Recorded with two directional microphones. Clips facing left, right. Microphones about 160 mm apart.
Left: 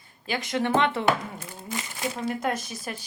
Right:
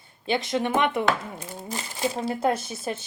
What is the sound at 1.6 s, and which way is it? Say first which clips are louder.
Speech: right 3 dB; 35° right (ahead or behind).